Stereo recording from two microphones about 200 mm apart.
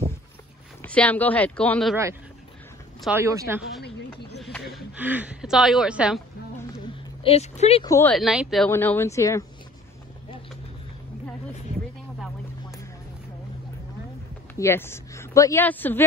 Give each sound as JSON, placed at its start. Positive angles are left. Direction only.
{"t": 0.8, "sound": "speech", "side_deg": 5}
{"t": 3.0, "sound": "speech", "side_deg": -10}
{"t": 4.4, "sound": "a sound", "side_deg": 5}
{"t": 4.7, "sound": "speech", "side_deg": -10}
{"t": 7.2, "sound": "speech", "side_deg": 30}
{"t": 7.8, "sound": "speech", "side_deg": 15}
{"t": 8.2, "sound": "speech", "side_deg": 0}
{"t": 8.6, "sound": "speech", "side_deg": 10}
{"t": 14.5, "sound": "speech", "side_deg": 10}